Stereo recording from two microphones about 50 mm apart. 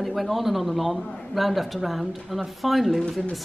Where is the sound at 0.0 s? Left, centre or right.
Centre.